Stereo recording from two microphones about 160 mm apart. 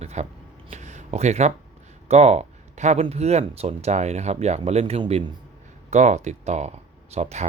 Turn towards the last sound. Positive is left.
turn(degrees=-45)  # may be behind; listen again after turning